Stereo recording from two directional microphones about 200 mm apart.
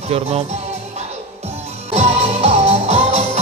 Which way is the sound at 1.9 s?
30° right (ahead or behind).